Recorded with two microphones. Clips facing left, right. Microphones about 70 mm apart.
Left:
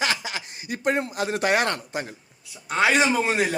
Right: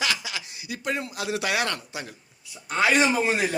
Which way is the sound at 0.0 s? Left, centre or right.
Left.